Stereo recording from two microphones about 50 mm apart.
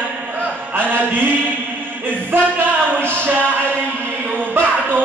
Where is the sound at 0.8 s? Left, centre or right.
Right.